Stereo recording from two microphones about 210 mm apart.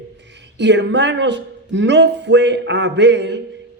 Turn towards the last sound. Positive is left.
turn(degrees=-55)  # may be behind; listen again after turning